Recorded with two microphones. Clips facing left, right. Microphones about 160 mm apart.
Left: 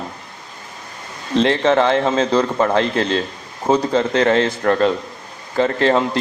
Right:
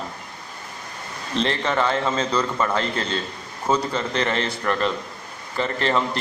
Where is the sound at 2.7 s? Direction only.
75° left (ahead or behind).